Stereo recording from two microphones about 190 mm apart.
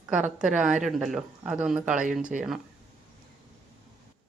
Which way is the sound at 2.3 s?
45° right (ahead or behind).